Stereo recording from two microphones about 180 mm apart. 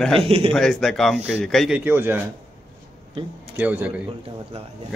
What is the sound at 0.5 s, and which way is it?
A man's voice, 5° left (ahead or behind).